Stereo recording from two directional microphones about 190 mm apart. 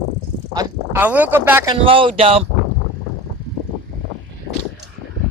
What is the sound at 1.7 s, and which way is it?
Speech, 30° right (ahead or behind).